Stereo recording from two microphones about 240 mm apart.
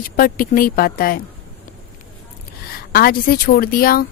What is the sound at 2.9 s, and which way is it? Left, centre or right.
A woman's voice, left.